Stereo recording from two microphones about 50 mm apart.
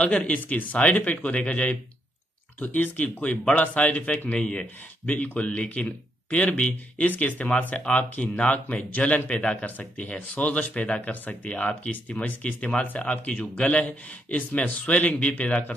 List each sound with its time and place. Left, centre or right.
0.0 s speech: left
2.6 s speech: left
9.7 s speech: left